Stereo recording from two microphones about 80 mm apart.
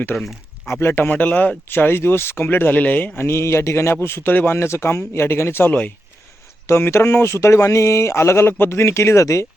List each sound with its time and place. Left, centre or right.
0.1 s speech: centre
0.7 s speech: left
1.0 s speech: centre
6.7 s speech: left